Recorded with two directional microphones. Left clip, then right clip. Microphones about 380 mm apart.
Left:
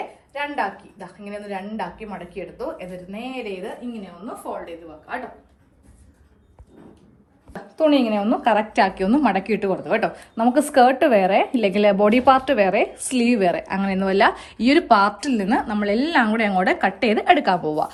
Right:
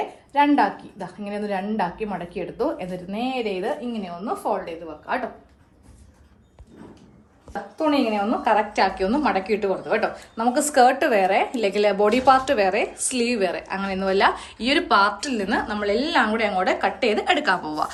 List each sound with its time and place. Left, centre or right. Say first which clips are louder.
0.3 s a woman's voice: right 7 dB; right
4.6 s a woman's voice: right 3 dB; centre
7.8 s a woman's voice: left 3 dB; centre